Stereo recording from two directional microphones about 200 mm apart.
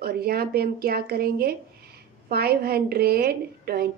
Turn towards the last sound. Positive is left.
turn(degrees=-50)  # may be behind; listen again after turning